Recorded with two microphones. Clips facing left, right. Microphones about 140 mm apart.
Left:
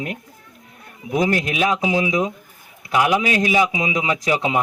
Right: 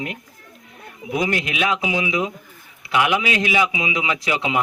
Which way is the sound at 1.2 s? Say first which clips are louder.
Left 3 dB; 40° left (ahead or behind).